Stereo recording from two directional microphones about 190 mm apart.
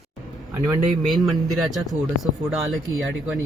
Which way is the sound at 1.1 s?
Centre (ahead or behind).